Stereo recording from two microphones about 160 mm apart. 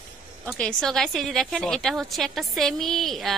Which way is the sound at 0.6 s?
5° left (ahead or behind).